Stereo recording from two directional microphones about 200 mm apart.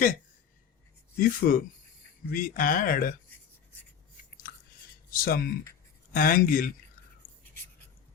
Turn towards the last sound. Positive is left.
turn(degrees=45)  # may be behind; listen again after turning